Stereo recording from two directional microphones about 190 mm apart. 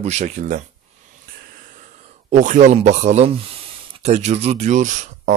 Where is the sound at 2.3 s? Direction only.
40° right (ahead or behind).